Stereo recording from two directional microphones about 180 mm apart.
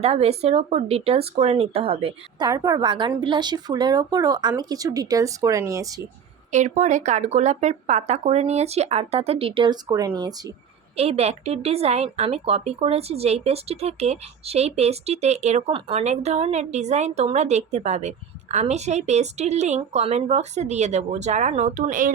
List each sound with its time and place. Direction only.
0.0 s speech: 35° right (ahead or behind)
2.5 s speech: 20° right (ahead or behind)
6.5 s speech: 40° right (ahead or behind); by 10.5 s 20° right (ahead or behind)
10.9 s speech: 35° right (ahead or behind)